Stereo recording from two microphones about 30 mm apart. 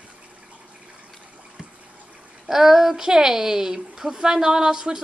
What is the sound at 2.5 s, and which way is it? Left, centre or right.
Speech, centre.